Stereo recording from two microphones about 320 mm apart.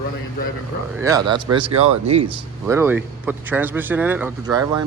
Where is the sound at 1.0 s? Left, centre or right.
Centre.